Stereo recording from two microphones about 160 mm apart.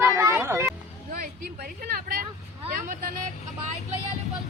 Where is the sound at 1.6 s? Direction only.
75° right (ahead or behind).